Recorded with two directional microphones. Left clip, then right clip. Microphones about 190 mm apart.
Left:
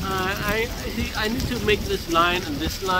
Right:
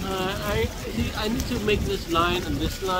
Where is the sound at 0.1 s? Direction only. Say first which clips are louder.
Left 3 dB; 5° left (ahead or behind).